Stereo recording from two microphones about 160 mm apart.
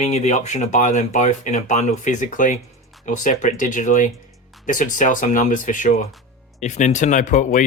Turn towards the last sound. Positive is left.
turn(degrees=50)  # may be behind; listen again after turning